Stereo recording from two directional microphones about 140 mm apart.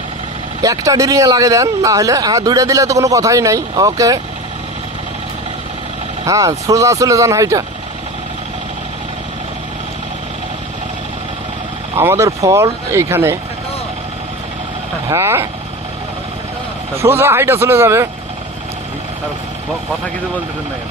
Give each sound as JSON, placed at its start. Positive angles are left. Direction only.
{"t": 0.6, "sound": "speech", "side_deg": -25}
{"t": 6.2, "sound": "speech", "side_deg": -25}
{"t": 11.9, "sound": "speech", "side_deg": -20}
{"t": 15.1, "sound": "speech", "side_deg": -15}
{"t": 16.9, "sound": "speech", "side_deg": -15}